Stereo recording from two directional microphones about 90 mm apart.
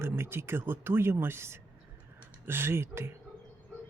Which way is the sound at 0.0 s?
25° right (ahead or behind).